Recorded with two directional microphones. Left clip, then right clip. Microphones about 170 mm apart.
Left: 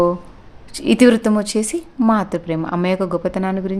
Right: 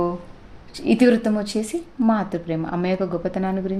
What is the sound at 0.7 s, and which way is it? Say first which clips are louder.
A woman's voice: left 4 dB; 35° left (ahead or behind).